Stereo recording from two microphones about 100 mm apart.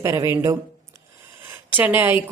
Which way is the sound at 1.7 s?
20° right (ahead or behind).